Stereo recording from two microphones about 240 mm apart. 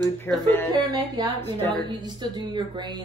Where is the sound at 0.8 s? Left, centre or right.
Centre.